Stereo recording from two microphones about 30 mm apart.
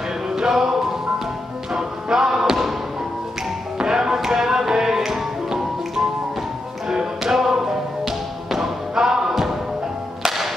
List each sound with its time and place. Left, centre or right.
0.4 s music: centre
2.4 s basketball bounce: centre
3.7 s music: right
8.5 s thump: centre
10.2 s music: centre